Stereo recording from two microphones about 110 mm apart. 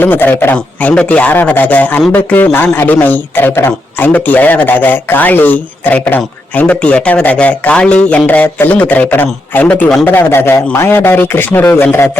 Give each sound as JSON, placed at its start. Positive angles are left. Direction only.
{"t": 0.0, "sound": "a man's voice", "side_deg": 20}